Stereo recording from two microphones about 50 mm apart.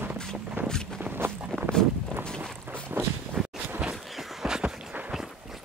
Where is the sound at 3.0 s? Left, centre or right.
Right.